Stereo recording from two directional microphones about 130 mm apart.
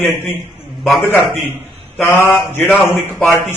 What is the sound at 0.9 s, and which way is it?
Speech, 15° left (ahead or behind).